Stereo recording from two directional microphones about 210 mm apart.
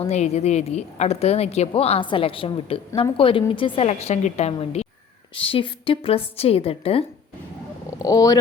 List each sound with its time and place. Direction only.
0.0 s a woman's voice: 30° left (ahead or behind)
7.9 s speech: 15° left (ahead or behind)